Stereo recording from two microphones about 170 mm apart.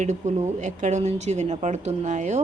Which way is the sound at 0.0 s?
45° right (ahead or behind).